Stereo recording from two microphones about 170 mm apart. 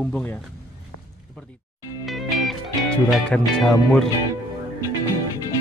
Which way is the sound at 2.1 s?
Centre (ahead or behind).